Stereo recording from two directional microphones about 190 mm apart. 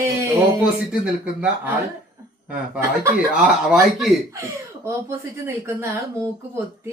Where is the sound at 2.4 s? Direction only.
10° right (ahead or behind).